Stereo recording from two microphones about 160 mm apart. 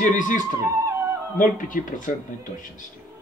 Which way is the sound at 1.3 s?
55° left (ahead or behind).